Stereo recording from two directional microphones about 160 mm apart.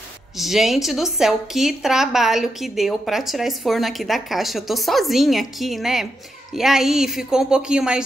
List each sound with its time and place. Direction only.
0.4 s a woman's voice: centre (ahead or behind)